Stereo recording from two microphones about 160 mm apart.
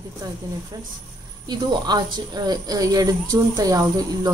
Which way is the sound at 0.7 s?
25° right (ahead or behind).